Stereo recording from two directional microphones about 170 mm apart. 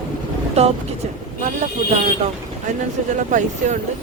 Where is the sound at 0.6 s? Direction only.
40° right (ahead or behind).